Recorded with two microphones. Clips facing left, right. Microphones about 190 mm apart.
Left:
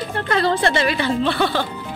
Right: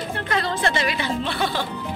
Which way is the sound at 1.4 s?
70° left (ahead or behind).